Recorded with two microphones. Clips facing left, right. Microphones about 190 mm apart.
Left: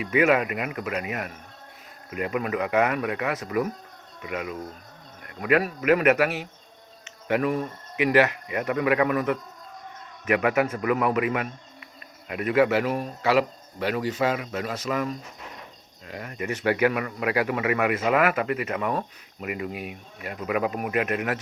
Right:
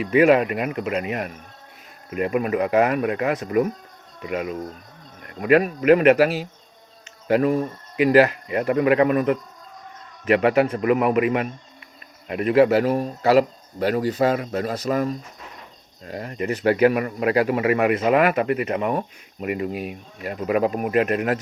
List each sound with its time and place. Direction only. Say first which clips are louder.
0.0 s speech: right 5 dB; 30° right (ahead or behind)